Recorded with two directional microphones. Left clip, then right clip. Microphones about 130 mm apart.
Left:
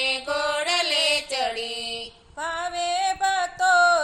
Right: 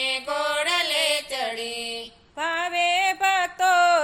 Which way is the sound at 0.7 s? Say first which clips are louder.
Left 3 dB; 10° left (ahead or behind).